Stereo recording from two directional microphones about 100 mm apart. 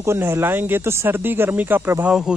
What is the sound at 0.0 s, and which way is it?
Speech, 25° right (ahead or behind).